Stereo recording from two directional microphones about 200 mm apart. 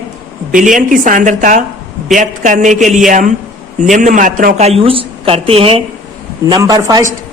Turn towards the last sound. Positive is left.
turn(degrees=-15)  # may be behind; listen again after turning